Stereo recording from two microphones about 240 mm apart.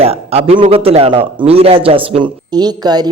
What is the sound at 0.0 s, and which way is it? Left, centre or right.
A man's voice, right.